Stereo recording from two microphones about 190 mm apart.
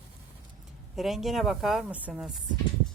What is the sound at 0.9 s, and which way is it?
A woman's voice, centre (ahead or behind).